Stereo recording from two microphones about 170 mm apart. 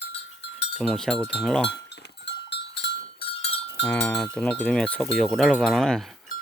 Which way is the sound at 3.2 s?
35° left (ahead or behind).